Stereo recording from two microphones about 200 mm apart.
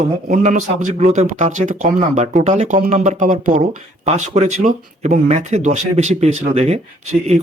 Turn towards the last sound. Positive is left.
turn(degrees=-35)  # may be behind; listen again after turning